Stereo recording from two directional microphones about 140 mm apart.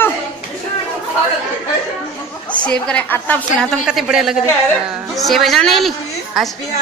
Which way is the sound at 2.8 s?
10° left (ahead or behind).